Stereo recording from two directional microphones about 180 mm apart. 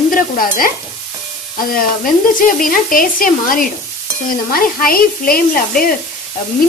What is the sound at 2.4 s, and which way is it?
Speech, 50° left (ahead or behind).